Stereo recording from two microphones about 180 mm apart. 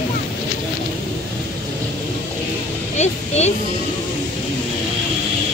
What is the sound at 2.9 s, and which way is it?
Speech, 35° left (ahead or behind).